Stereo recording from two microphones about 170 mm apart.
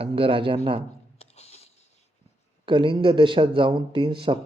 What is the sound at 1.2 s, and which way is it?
Music, 40° left (ahead or behind).